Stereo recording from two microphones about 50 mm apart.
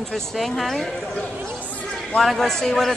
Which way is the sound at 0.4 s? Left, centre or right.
Centre.